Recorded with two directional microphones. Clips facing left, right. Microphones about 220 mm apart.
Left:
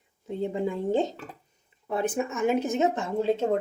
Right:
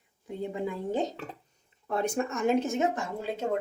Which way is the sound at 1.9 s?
5° left (ahead or behind).